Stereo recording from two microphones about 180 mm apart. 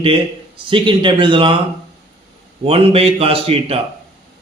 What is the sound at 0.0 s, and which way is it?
Speech, 30° right (ahead or behind).